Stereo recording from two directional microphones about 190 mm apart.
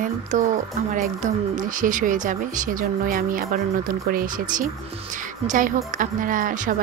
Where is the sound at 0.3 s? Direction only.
40° right (ahead or behind).